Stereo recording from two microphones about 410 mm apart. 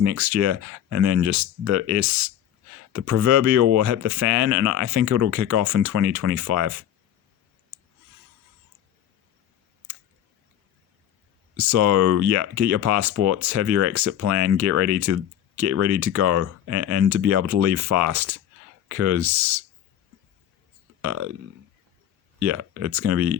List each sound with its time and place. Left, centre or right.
0.0 s speech: right
11.5 s speech: right
21.0 s speech: right
22.4 s speech: right